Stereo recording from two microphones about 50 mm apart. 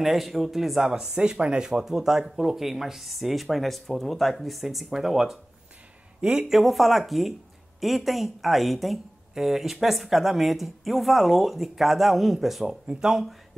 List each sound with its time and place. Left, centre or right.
0.0 s speech: centre
6.6 s speech: centre